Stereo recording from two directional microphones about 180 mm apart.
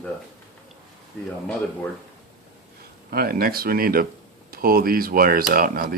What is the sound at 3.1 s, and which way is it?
Speech, 55° right (ahead or behind).